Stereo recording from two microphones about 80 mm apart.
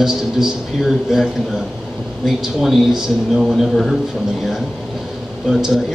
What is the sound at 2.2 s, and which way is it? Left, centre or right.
A man's voice, centre.